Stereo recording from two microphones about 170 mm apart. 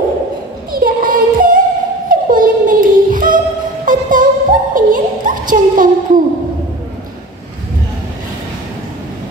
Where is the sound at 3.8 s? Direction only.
50° right (ahead or behind).